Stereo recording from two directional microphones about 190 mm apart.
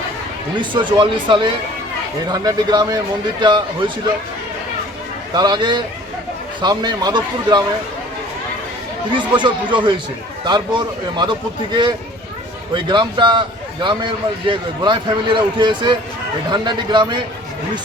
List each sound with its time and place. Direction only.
0.6 s a man's voice: 25° right (ahead or behind)
5.3 s a man's voice: 20° right (ahead or behind)
9.1 s a man's voice: 25° right (ahead or behind)